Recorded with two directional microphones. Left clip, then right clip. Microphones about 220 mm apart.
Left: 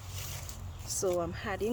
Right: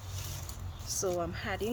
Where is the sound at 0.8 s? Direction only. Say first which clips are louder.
Left 1 dB; 35° left (ahead or behind).